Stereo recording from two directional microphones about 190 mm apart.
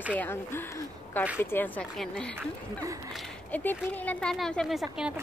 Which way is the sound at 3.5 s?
10° left (ahead or behind).